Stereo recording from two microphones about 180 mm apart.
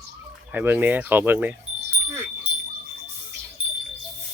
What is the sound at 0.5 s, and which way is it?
Speech, 10° right (ahead or behind).